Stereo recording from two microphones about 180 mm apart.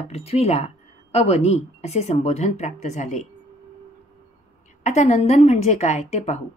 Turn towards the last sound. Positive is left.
turn(degrees=40)  # may be behind; listen again after turning